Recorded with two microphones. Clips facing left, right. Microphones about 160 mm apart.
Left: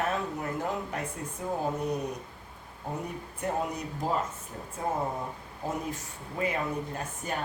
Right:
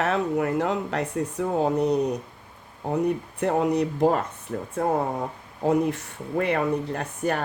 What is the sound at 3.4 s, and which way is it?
Speech, 75° right (ahead or behind).